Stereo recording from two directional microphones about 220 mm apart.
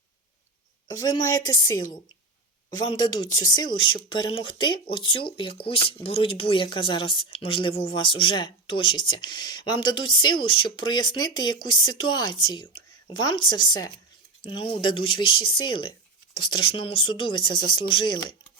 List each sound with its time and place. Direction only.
0.9 s a woman's voice: 15° left (ahead or behind)